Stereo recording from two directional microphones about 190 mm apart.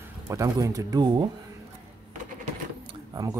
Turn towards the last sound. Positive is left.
turn(degrees=-20)  # may be behind; listen again after turning